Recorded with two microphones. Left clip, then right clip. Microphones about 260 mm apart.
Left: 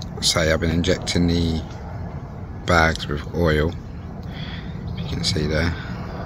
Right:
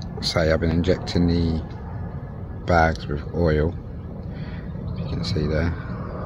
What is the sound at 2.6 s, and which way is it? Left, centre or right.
Speech, centre.